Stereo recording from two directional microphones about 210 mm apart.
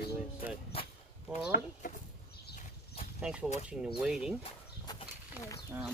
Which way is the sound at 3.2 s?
5° right (ahead or behind).